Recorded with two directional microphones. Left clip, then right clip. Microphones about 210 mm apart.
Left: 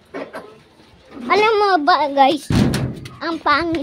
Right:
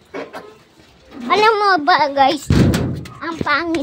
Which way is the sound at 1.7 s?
5° left (ahead or behind).